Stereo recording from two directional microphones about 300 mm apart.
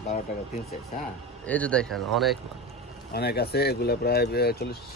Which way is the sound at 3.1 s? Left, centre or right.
Left.